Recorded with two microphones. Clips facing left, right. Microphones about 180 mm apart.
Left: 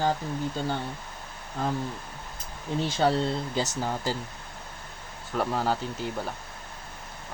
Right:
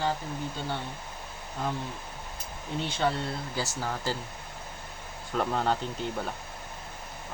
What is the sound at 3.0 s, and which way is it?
Speech, 35° left (ahead or behind).